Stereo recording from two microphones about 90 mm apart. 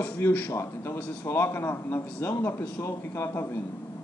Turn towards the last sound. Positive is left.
turn(degrees=25)  # may be behind; listen again after turning